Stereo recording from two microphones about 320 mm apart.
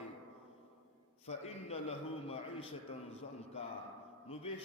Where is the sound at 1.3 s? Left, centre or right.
Centre.